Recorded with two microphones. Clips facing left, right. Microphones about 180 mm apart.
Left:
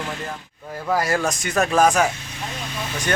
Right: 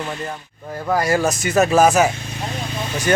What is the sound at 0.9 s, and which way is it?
Speech, centre (ahead or behind).